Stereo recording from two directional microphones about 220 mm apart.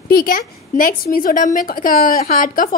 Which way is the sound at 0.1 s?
45° left (ahead or behind).